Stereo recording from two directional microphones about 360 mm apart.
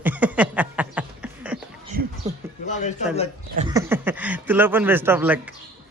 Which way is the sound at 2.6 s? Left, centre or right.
Centre.